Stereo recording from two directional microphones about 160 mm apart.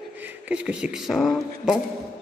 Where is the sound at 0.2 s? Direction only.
10° right (ahead or behind).